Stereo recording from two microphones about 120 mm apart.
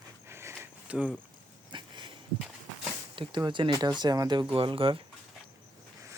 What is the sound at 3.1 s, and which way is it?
Speech, 40° right (ahead or behind).